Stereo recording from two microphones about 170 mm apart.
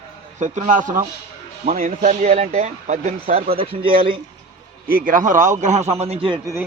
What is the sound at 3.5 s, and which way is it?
Speech, 30° right (ahead or behind).